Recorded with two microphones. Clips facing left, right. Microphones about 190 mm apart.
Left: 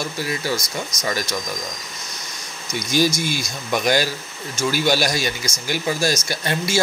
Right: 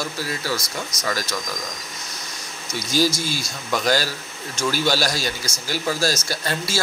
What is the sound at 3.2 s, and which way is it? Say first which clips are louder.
Speech: left 3 dB; 15° left (ahead or behind).